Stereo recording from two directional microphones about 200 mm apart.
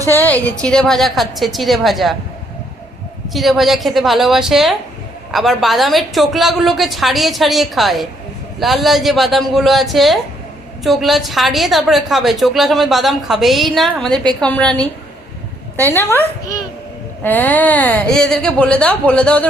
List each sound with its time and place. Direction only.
0.1 s a woman's voice: 10° left (ahead or behind)
3.2 s a woman's voice: centre (ahead or behind)